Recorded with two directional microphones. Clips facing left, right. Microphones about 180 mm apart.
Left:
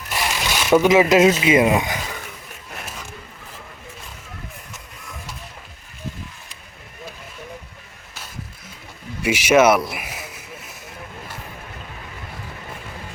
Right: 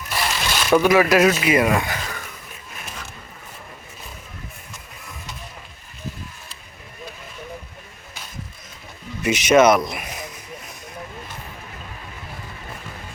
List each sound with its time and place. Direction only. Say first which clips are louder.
0.1 s a sound: even; 15° left (ahead or behind)
1.4 s speech: left 2 dB; 25° left (ahead or behind)
9.2 s speech: even; 10° left (ahead or behind)